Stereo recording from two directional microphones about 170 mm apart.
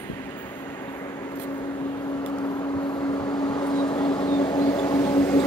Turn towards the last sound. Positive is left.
turn(degrees=15)  # may be behind; listen again after turning